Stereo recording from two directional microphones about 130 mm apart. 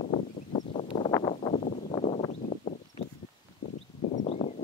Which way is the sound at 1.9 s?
45° left (ahead or behind).